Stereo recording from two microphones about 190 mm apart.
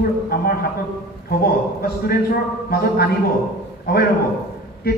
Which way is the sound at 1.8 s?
55° left (ahead or behind).